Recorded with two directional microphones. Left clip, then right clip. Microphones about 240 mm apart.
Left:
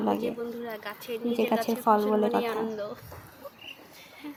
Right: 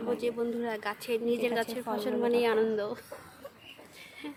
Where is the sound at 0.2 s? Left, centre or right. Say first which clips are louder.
Right 1 dB; right.